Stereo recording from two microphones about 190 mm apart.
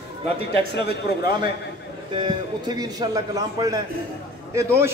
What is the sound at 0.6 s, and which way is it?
Speech, 60° left (ahead or behind).